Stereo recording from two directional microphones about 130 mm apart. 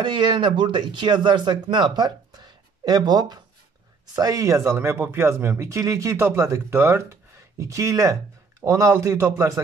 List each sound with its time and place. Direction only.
0.0 s speech: 35° right (ahead or behind)